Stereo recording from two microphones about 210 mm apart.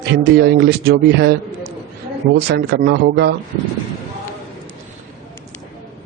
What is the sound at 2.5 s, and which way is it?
Speech, 55° right (ahead or behind).